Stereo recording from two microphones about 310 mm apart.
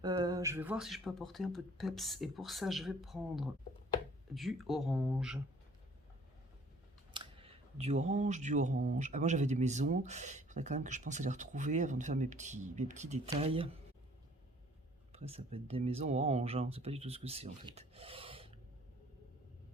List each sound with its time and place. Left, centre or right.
0.0 s speech: centre
7.1 s speech: centre
15.1 s speech: centre